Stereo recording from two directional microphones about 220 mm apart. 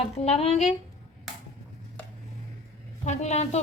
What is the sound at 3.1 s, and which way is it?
Speech, 30° left (ahead or behind).